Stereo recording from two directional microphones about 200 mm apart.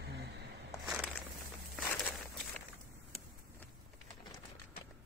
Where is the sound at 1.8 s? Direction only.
5° left (ahead or behind).